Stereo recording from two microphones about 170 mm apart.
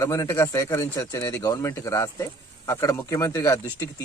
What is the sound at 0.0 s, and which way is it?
Speech, 20° left (ahead or behind).